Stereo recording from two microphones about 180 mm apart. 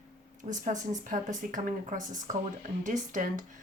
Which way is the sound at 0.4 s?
45° right (ahead or behind).